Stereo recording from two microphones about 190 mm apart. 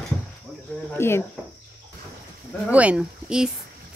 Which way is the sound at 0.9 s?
10° left (ahead or behind).